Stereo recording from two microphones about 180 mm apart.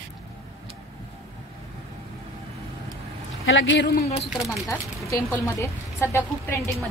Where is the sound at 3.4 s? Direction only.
90° left; by 4.1 s 70° left (ahead or behind).